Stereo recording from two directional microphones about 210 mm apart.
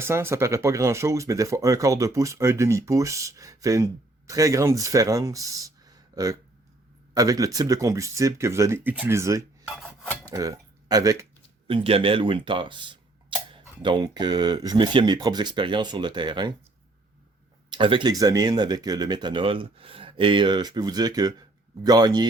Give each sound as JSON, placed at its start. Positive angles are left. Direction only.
{"t": 0.0, "sound": "speech", "side_deg": -10}
{"t": 9.6, "sound": "filing", "side_deg": 0}
{"t": 10.2, "sound": "speech", "side_deg": -15}
{"t": 17.7, "sound": "speech", "side_deg": -25}